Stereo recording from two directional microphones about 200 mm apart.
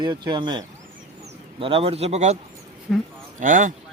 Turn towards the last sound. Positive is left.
turn(degrees=-40)  # may be behind; listen again after turning